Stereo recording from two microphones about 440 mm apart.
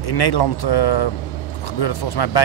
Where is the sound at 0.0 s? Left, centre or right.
Left.